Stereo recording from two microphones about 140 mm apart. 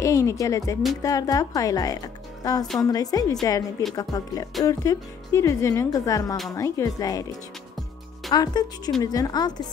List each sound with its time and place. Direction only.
0.0 s speech: 20° left (ahead or behind)